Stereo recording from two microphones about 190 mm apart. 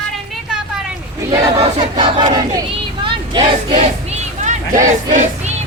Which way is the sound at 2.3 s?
25° right (ahead or behind).